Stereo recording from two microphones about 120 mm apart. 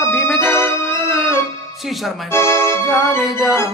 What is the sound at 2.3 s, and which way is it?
Speech, 20° left (ahead or behind).